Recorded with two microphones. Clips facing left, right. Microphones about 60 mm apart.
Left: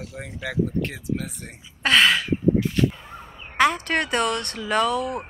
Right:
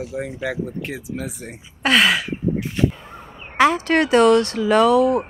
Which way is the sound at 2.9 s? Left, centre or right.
Centre.